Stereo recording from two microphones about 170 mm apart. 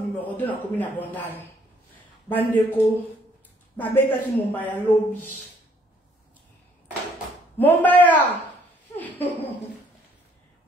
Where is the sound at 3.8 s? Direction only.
10° left (ahead or behind).